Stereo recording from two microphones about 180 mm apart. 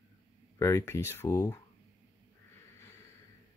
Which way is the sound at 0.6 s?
15° left (ahead or behind).